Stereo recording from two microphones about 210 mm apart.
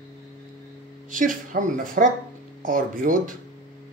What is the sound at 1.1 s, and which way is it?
Speech, 40° right (ahead or behind).